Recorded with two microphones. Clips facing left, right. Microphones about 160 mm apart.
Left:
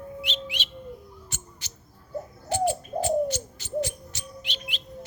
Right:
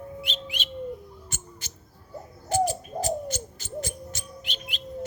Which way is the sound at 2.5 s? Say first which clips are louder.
Even; 40° right (ahead or behind).